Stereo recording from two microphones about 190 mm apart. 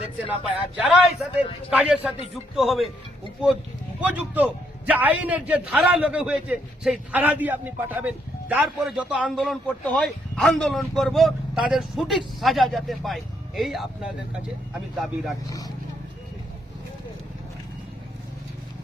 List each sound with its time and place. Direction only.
0.8 s a man's voice: centre (ahead or behind)
4.0 s a man's voice: 10° right (ahead or behind)
15.4 s speech: 20° left (ahead or behind)